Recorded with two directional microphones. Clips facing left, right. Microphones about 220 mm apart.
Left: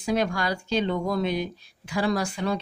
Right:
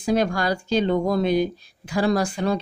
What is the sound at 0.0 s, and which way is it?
A woman's voice, 40° right (ahead or behind).